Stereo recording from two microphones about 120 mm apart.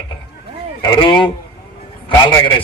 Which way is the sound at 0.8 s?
40° left (ahead or behind).